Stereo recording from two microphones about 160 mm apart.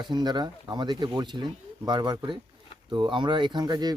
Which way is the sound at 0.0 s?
25° right (ahead or behind).